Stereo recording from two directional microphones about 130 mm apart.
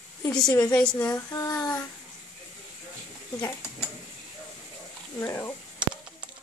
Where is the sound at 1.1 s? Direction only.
25° left (ahead or behind).